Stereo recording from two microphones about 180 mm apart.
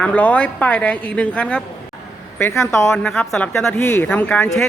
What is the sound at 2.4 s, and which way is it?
Speech, 15° left (ahead or behind).